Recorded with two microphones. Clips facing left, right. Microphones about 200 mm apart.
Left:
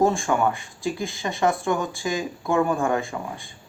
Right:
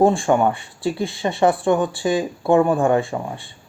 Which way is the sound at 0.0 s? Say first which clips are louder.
Right 5 dB; 30° right (ahead or behind).